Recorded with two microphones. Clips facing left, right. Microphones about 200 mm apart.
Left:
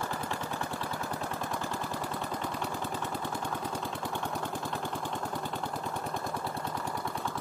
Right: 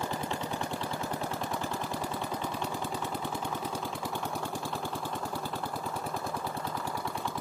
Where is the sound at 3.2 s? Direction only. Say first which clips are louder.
Even; 10° right (ahead or behind).